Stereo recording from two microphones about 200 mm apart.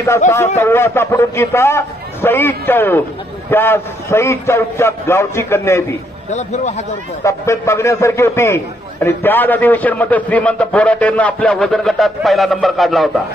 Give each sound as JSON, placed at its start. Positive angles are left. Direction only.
{"t": 0.6, "sound": "a man's voice", "side_deg": 10}
{"t": 6.3, "sound": "a man's voice", "side_deg": 35}
{"t": 7.2, "sound": "a man's voice", "side_deg": 15}